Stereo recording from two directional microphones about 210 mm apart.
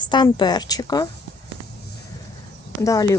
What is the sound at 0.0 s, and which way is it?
A woman's voice, 20° left (ahead or behind).